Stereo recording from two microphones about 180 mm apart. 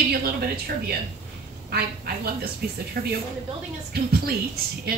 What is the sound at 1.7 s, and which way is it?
A woman's voice, 60° right (ahead or behind).